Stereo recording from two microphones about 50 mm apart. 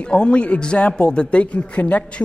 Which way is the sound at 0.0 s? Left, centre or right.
Left.